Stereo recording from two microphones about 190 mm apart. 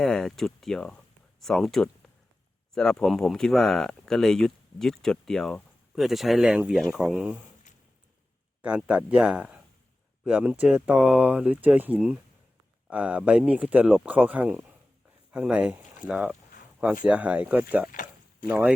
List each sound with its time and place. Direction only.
0.0 s speech: centre (ahead or behind)
8.6 s speech: 5° right (ahead or behind)
17.9 s a sound: 45° left (ahead or behind)
18.4 s speech: 5° right (ahead or behind)